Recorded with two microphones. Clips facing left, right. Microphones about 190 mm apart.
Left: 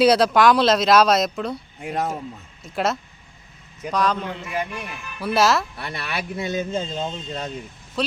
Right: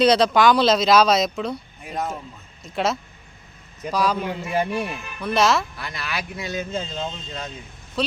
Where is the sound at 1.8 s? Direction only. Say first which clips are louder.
Left 5 dB; 75° left (ahead or behind).